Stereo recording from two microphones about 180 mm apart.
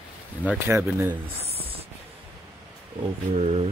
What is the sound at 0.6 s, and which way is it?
Speech, 15° right (ahead or behind).